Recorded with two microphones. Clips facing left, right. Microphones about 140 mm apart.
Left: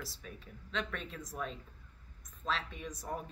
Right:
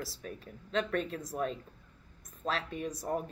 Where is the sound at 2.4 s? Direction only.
45° right (ahead or behind).